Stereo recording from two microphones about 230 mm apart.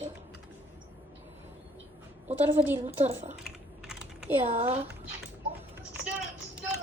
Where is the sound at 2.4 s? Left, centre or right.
Centre.